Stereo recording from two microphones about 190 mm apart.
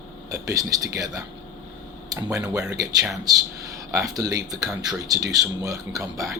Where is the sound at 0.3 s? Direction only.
20° right (ahead or behind).